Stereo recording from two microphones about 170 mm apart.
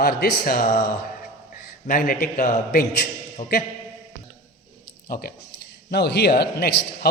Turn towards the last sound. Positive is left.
turn(degrees=70)  # may be behind; listen again after turning